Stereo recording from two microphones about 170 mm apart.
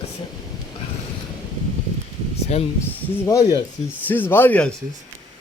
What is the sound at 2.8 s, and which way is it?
Speech, 15° left (ahead or behind).